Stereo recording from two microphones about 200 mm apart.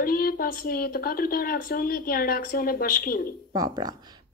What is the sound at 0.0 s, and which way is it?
A woman's voice, 50° left (ahead or behind).